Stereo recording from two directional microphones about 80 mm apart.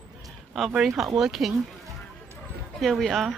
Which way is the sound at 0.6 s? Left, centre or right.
Centre.